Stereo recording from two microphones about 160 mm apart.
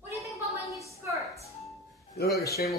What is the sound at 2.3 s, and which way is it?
Speech, 20° left (ahead or behind).